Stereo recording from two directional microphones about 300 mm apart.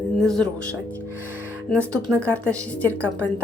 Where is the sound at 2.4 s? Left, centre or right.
Centre.